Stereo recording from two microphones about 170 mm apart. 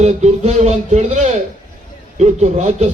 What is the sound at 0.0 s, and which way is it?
Speech, 40° right (ahead or behind).